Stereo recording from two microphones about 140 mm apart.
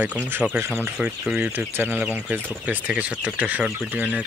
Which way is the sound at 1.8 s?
15° right (ahead or behind).